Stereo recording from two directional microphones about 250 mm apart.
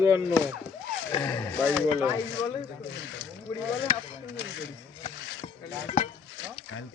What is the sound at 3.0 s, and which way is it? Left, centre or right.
Speech, left.